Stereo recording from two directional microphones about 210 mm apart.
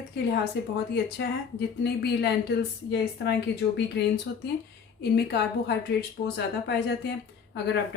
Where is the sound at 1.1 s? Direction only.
50° left (ahead or behind).